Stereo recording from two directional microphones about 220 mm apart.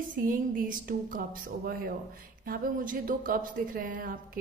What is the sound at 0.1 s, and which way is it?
A woman's voice, 40° right (ahead or behind).